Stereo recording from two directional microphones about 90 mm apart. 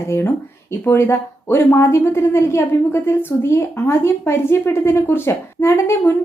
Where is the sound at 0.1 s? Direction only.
25° left (ahead or behind).